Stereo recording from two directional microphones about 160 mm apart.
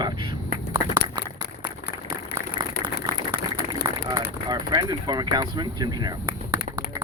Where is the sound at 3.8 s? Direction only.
25° right (ahead or behind).